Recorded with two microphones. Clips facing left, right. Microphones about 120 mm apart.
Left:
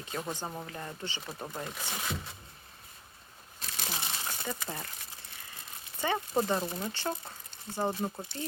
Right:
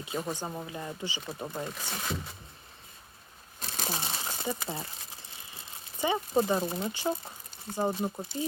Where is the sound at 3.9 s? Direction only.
30° right (ahead or behind).